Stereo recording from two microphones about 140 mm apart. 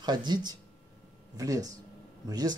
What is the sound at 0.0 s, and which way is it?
Speech, 30° right (ahead or behind).